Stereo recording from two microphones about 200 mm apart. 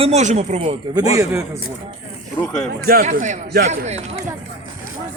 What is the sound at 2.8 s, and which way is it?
Speech, 45° right (ahead or behind).